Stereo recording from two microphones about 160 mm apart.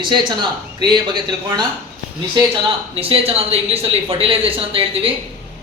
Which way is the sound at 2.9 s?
35° right (ahead or behind).